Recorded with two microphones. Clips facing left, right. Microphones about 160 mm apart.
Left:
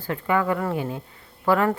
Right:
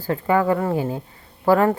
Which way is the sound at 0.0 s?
30° right (ahead or behind).